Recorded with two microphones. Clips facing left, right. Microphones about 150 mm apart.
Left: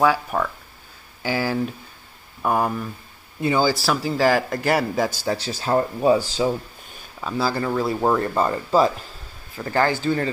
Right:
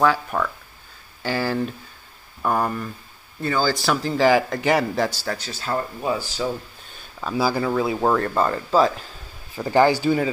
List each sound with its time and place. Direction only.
0.0 s speech: 10° left (ahead or behind)
3.7 s speech: 5° left (ahead or behind)
5.7 s speech: 30° left (ahead or behind)
7.3 s speech: 10° right (ahead or behind); by 9.0 s 10° left (ahead or behind)
9.6 s speech: 15° right (ahead or behind)